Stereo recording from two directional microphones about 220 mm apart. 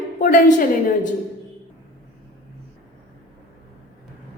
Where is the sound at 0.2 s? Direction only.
40° left (ahead or behind).